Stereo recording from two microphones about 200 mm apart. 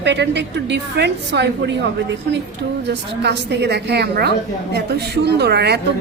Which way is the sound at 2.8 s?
60° right (ahead or behind).